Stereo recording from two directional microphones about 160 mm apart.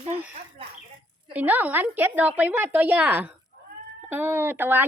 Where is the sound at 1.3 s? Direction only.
10° right (ahead or behind).